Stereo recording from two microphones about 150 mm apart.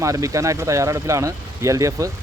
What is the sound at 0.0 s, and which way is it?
Speech, 20° right (ahead or behind).